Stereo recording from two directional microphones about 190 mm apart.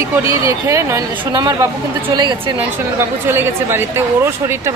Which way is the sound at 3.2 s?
10° right (ahead or behind).